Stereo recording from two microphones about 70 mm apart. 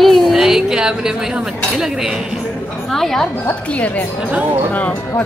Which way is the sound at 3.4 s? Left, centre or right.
Centre.